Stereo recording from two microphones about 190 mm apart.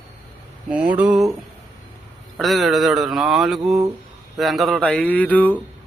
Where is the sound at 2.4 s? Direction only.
Centre (ahead or behind).